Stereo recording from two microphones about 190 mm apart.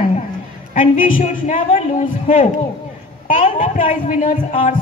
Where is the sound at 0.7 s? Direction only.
45° left (ahead or behind).